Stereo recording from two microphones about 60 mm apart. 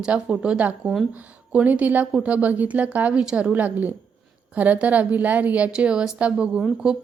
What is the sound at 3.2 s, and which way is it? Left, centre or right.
Speech, centre.